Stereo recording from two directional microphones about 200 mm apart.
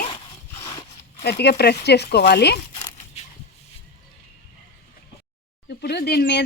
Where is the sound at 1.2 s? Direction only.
55° left (ahead or behind).